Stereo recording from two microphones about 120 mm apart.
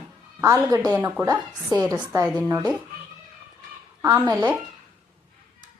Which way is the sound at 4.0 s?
35° right (ahead or behind).